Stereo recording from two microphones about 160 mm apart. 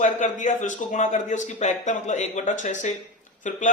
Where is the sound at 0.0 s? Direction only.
50° left (ahead or behind).